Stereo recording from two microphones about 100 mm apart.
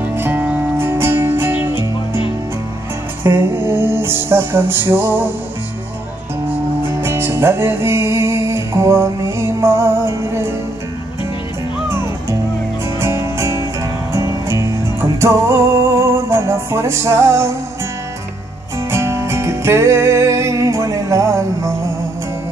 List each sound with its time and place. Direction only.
0.1 s music: 20° right (ahead or behind)
3.3 s music: 20° right (ahead or behind)
6.9 s music: 25° right (ahead or behind)
11.9 s music: 25° right (ahead or behind)
18.9 s music: 25° right (ahead or behind)